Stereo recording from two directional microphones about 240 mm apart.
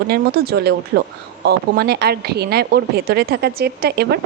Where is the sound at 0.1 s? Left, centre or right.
Right.